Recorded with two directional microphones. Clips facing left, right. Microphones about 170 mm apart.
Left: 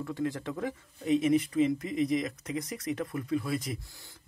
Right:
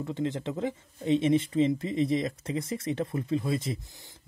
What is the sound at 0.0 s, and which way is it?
Speech, 20° right (ahead or behind).